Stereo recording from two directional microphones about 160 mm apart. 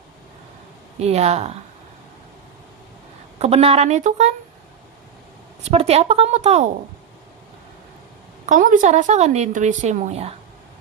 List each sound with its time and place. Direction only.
0.9 s speech: 40° right (ahead or behind)
3.4 s speech: 40° right (ahead or behind)
5.6 s speech: 40° right (ahead or behind)
8.4 s speech: 55° right (ahead or behind)